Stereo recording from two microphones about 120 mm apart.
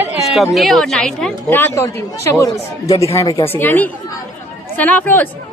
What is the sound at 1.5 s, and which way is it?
Speech, 20° left (ahead or behind).